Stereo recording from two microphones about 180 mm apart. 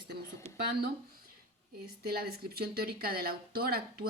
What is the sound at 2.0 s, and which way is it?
Speech, 60° right (ahead or behind).